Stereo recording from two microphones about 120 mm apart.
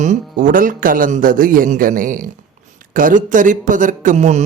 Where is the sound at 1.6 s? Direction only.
90° right.